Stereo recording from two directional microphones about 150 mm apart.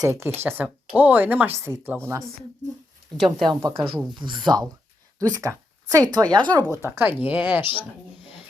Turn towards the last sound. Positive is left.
turn(degrees=-15)  # may be behind; listen again after turning